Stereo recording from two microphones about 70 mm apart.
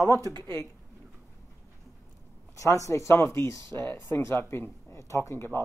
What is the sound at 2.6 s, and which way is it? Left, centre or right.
Speech, left.